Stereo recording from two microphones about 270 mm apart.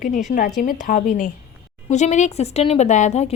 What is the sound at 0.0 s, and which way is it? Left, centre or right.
Speech, left.